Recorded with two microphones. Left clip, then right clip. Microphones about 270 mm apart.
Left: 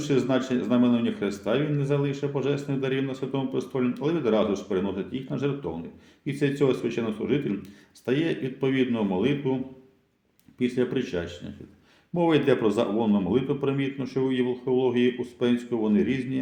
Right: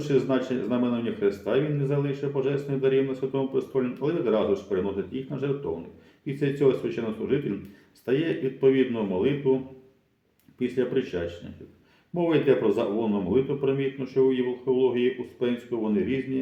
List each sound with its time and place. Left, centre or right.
0.0 s speech: left
10.6 s speech: left